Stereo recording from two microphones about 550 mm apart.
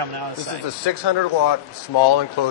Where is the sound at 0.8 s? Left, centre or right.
Left.